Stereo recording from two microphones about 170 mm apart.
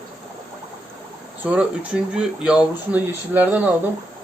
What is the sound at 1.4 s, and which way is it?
Speech, 10° right (ahead or behind).